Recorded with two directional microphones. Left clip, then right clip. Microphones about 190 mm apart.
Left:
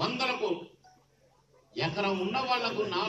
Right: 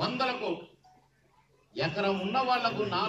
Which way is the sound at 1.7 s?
5° left (ahead or behind).